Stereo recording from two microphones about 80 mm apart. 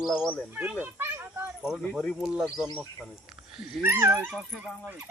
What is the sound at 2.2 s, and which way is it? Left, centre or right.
Speech, centre.